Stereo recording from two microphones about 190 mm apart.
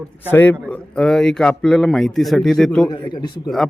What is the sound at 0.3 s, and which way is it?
A man's voice, 10° left (ahead or behind).